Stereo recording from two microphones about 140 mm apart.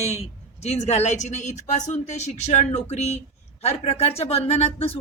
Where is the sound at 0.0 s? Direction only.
50° left (ahead or behind).